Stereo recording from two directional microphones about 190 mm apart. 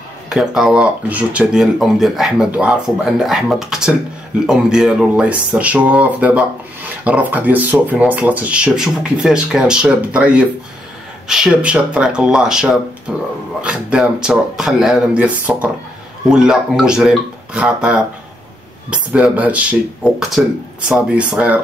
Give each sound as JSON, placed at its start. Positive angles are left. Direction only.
{"t": 0.3, "sound": "speech", "side_deg": 0}